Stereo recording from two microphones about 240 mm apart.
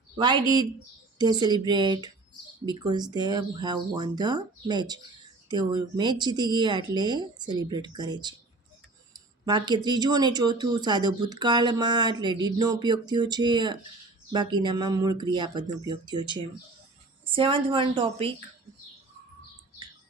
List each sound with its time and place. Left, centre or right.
1.2 s speech: centre
9.5 s a woman's voice: centre